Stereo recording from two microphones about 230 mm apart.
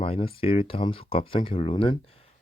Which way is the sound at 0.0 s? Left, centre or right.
Left.